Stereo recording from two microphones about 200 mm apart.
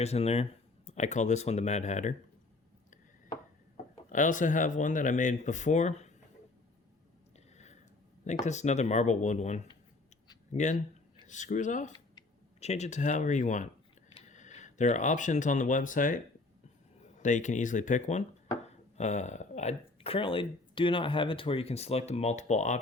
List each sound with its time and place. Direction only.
0.0 s speech: 30° left (ahead or behind)
4.1 s speech: 40° left (ahead or behind)
7.3 s a sound: 35° left (ahead or behind)
8.4 s speech: 35° left (ahead or behind)